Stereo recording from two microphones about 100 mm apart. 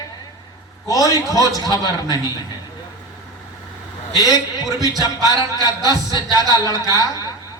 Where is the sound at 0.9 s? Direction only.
35° left (ahead or behind).